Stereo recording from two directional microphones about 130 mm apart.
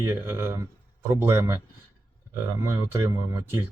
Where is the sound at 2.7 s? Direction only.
20° right (ahead or behind).